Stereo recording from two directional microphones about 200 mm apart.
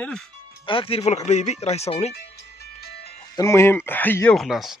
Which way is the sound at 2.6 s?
55° left (ahead or behind).